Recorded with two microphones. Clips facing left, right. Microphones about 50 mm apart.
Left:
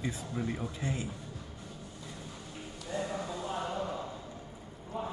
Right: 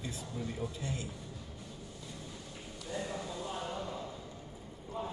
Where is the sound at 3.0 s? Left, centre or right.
Left.